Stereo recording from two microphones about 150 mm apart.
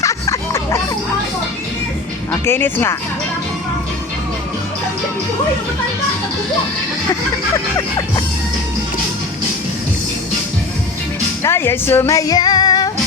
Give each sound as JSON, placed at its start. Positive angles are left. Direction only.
{"t": 0.0, "sound": "music", "side_deg": 20}
{"t": 2.3, "sound": "speech", "side_deg": 15}
{"t": 7.5, "sound": "speech", "side_deg": 25}
{"t": 11.4, "sound": "speech", "side_deg": 15}